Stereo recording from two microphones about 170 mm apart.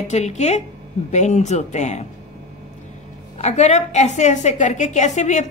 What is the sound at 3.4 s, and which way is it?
A woman's voice, 40° left (ahead or behind).